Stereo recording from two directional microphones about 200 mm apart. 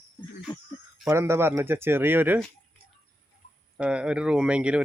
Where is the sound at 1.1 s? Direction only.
15° right (ahead or behind).